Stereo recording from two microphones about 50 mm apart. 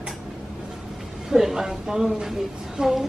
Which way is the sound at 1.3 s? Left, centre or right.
Centre.